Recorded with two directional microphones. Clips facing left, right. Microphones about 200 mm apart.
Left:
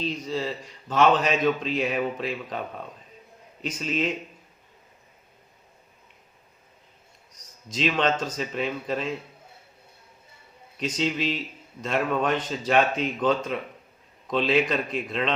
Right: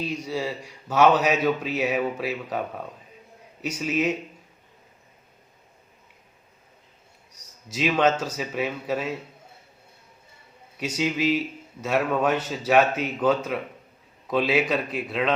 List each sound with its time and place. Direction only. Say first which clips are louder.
0.0 s a man's voice: even; 10° right (ahead or behind)
7.3 s a man's voice: right 1 dB; 10° right (ahead or behind)
10.8 s a man's voice: right 1 dB; 10° right (ahead or behind)